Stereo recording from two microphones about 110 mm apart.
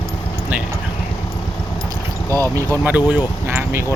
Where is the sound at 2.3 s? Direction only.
20° left (ahead or behind).